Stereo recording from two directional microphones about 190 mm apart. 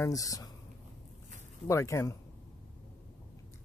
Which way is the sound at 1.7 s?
15° left (ahead or behind).